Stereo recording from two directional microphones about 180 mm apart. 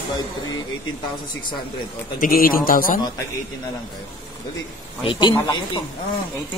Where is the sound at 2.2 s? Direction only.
50° left (ahead or behind).